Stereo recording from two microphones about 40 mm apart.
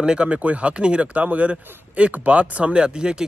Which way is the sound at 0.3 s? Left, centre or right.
Right.